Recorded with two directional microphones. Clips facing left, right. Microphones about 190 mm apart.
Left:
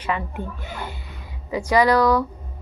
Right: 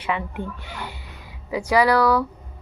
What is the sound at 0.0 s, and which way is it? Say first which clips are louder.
Speech: even; 10° right (ahead or behind).